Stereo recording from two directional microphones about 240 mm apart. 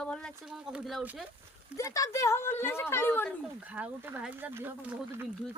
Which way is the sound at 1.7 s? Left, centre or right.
Centre.